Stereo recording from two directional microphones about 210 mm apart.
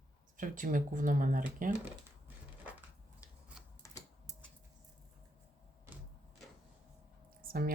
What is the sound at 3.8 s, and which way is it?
Typing, 15° left (ahead or behind).